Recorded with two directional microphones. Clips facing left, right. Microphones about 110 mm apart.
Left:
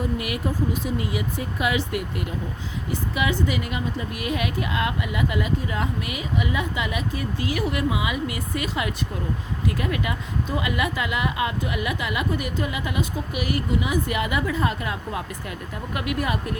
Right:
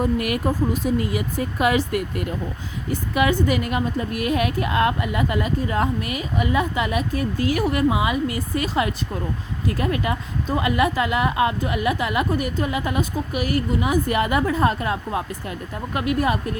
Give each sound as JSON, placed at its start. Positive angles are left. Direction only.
{"t": 0.0, "sound": "a woman's voice", "side_deg": -50}